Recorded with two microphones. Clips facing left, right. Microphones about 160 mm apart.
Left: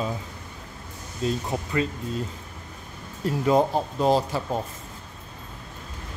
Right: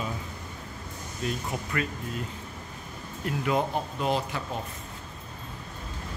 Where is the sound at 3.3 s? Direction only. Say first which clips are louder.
Left 6 dB; 35° left (ahead or behind).